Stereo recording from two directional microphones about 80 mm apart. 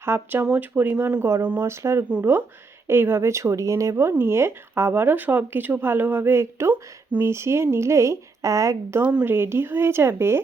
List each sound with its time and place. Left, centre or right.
0.0 s speech: right
4.0 s speech: right
9.0 s speech: centre